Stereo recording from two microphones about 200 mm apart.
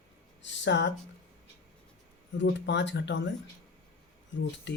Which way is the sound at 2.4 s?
65° left (ahead or behind).